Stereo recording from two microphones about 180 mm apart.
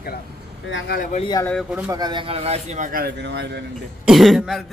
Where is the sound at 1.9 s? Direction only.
25° right (ahead or behind).